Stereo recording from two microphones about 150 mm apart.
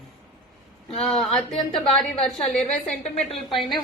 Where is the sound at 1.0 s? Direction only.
5° left (ahead or behind).